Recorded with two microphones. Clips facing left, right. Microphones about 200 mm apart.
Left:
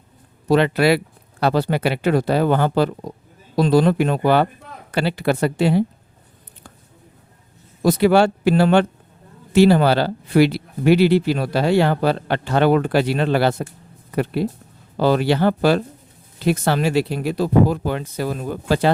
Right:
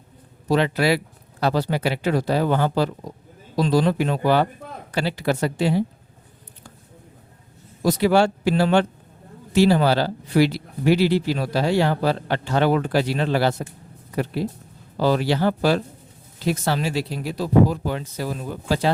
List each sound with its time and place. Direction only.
0.4 s speech: 60° left (ahead or behind)
7.8 s speech: 55° left (ahead or behind)
14.9 s speech: 60° left (ahead or behind)